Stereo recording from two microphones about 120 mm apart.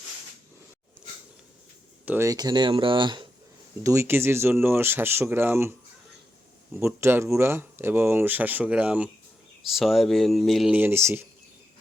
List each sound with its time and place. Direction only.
2.0 s speech: 20° right (ahead or behind)
2.3 s speech: 35° right (ahead or behind)
3.8 s speech: 20° right (ahead or behind)
6.7 s speech: 20° right (ahead or behind); by 10.7 s centre (ahead or behind)
10.7 s speech: 15° right (ahead or behind)